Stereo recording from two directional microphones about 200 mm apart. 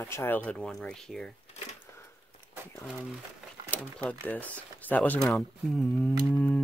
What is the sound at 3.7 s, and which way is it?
Speech, 5° left (ahead or behind).